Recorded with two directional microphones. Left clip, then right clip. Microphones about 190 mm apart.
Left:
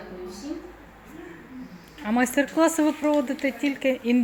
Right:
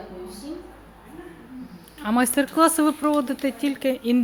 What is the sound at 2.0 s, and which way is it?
Speech, 20° right (ahead or behind).